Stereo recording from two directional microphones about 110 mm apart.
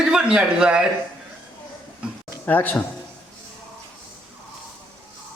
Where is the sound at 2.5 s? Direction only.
15° left (ahead or behind).